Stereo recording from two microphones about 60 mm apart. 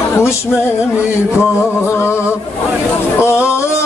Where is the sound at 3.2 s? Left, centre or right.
Left.